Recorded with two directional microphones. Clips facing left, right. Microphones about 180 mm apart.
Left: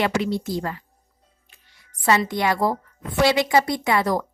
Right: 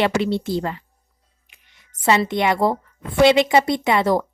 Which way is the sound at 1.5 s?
20° right (ahead or behind).